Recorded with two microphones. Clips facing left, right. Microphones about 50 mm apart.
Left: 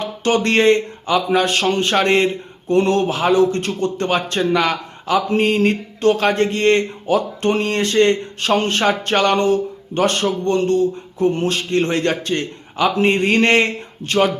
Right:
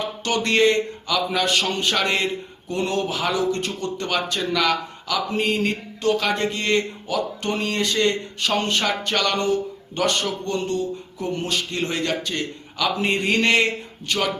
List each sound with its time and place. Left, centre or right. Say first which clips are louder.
0.2 s speech: left 4 dB; left
4.1 s speech: left 5 dB; left
5.3 s speech: left 5 dB; left